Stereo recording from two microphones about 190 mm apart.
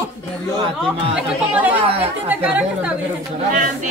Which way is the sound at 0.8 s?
5° left (ahead or behind).